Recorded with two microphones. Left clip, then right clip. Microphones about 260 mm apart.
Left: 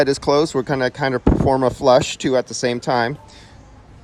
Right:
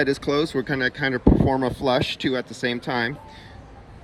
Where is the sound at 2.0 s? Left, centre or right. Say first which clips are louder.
Left 6 dB; left.